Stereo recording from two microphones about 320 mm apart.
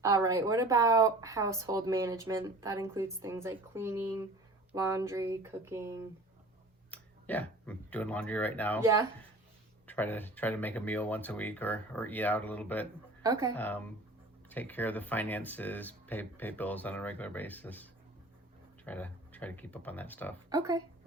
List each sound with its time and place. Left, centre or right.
0.0 s a woman's voice: centre
6.9 s speech: centre
8.8 s a woman's voice: centre
9.8 s speech: centre
13.2 s a woman's voice: centre
13.6 s speech: centre
18.9 s speech: centre
20.5 s a woman's voice: centre